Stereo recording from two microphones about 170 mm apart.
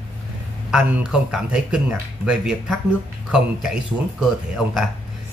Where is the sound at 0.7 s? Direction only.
5° right (ahead or behind).